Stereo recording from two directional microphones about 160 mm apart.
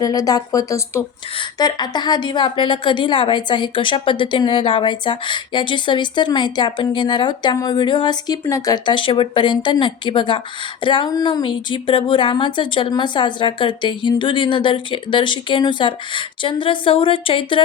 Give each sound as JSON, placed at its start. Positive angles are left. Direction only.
{"t": 0.0, "sound": "a woman's voice", "side_deg": 20}